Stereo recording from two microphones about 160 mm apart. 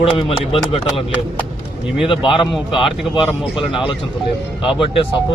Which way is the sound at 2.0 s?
35° left (ahead or behind).